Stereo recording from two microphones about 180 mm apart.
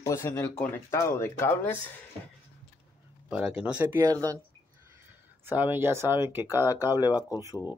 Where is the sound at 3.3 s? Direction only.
5° right (ahead or behind).